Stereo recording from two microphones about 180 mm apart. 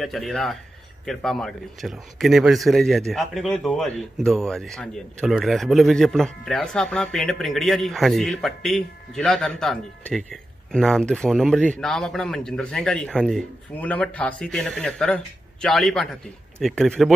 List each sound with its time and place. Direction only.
0.0 s a man's voice: centre (ahead or behind)